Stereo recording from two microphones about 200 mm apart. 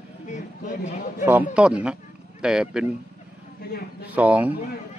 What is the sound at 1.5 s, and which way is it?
A man's voice, 5° right (ahead or behind).